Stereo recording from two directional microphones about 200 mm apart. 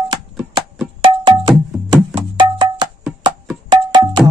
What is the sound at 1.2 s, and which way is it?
Music, 25° right (ahead or behind).